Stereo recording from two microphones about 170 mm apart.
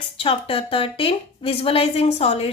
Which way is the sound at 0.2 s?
35° left (ahead or behind).